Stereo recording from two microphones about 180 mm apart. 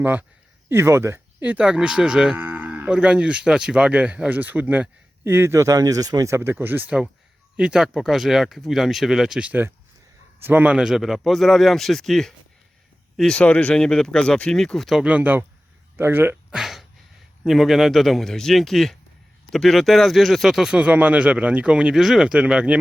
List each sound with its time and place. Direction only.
0.0 s moo: 10° right (ahead or behind)
7.5 s speech: 5° right (ahead or behind)